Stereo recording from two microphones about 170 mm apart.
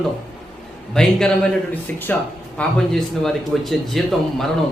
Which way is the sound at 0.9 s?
5° left (ahead or behind).